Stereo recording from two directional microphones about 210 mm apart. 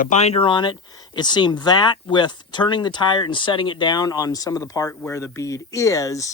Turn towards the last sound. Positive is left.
turn(degrees=15)  # may be behind; listen again after turning